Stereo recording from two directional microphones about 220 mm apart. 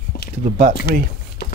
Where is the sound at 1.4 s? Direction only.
45° left (ahead or behind).